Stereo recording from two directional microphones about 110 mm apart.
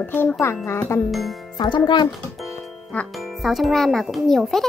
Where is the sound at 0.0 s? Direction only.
15° left (ahead or behind).